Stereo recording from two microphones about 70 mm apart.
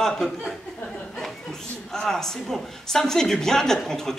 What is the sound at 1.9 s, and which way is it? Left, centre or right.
Speech, centre.